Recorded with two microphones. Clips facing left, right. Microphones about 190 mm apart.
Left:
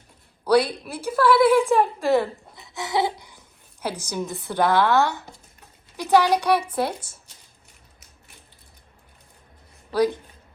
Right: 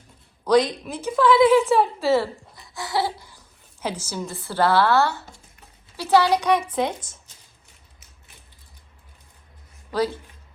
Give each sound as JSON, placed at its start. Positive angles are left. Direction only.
{"t": 0.4, "sound": "a woman's voice", "side_deg": 10}
{"t": 2.6, "sound": "a sound", "side_deg": 20}
{"t": 3.8, "sound": "a woman's voice", "side_deg": 15}
{"t": 9.9, "sound": "a woman's voice", "side_deg": 15}